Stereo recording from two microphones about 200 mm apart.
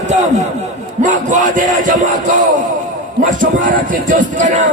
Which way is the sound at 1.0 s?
40° right (ahead or behind).